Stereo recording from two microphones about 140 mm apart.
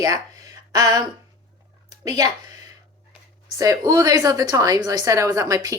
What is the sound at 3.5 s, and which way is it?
A woman's voice, 25° right (ahead or behind).